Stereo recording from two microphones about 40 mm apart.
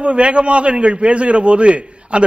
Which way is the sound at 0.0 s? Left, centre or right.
Right.